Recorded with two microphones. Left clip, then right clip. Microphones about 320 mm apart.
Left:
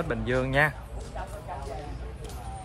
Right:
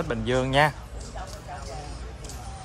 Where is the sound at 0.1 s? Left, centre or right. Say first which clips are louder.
Right 3 dB; centre.